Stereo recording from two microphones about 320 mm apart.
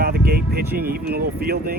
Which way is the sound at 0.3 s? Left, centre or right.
Right.